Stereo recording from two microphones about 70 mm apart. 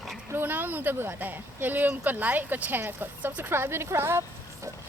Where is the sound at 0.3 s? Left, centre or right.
Right.